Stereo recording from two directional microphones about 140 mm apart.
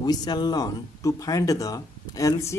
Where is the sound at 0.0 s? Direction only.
30° left (ahead or behind).